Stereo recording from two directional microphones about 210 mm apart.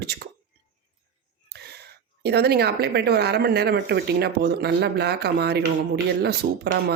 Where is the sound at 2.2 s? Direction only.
50° right (ahead or behind).